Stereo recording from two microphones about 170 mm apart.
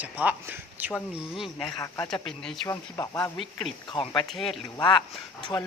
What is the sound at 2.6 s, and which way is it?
Speech, 20° left (ahead or behind).